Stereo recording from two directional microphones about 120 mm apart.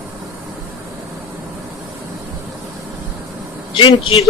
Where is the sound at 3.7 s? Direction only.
50° left (ahead or behind).